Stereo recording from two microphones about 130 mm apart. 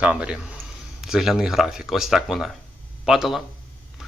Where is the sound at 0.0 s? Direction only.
10° right (ahead or behind).